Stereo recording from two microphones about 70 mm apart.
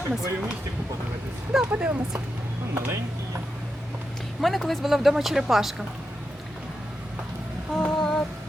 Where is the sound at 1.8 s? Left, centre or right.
Centre.